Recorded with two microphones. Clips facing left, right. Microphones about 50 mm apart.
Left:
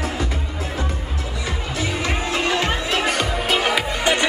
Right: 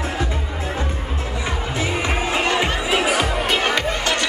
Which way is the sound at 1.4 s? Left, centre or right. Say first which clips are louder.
Right 1 dB; right.